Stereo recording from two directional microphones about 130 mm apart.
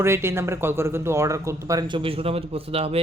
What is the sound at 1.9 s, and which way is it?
A man's voice, 45° right (ahead or behind).